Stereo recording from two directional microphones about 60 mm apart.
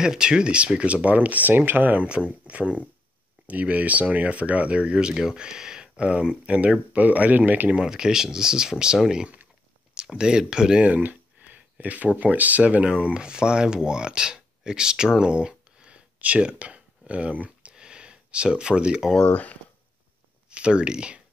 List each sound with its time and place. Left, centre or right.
0.0 s speech: centre; by 7.7 s right
7.7 s speech: centre
10.9 s speech: right; by 19.1 s centre
19.1 s speech: left
20.4 s speech: centre